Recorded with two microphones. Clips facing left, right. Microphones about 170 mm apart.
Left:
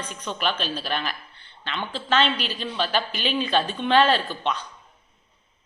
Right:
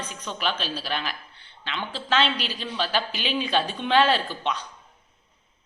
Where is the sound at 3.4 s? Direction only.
10° right (ahead or behind).